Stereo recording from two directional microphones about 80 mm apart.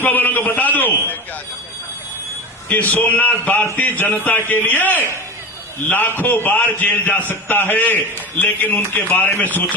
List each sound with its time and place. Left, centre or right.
0.0 s a man's voice: left
2.6 s a man's voice: left